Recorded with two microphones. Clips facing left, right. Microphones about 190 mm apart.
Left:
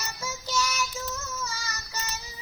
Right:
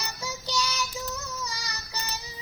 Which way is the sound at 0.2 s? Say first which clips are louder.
Left 1 dB; 15° right (ahead or behind).